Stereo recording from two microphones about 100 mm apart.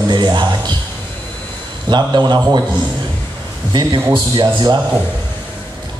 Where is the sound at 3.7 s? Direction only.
45° right (ahead or behind).